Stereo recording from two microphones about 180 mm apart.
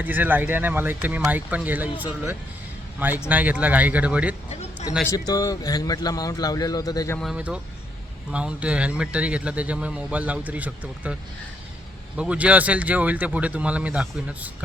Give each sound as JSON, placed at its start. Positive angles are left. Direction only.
{"t": 0.0, "sound": "speech", "side_deg": -10}
{"t": 5.0, "sound": "a man's voice", "side_deg": 20}
{"t": 7.2, "sound": "speech", "side_deg": -5}